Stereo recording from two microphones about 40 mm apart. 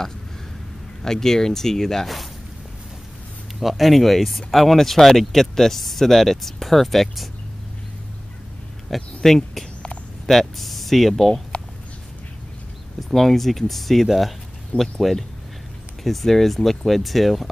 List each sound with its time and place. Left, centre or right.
1.0 s speech: centre
3.5 s speech: centre
8.9 s speech: centre
11.5 s a sound: left
13.1 s speech: centre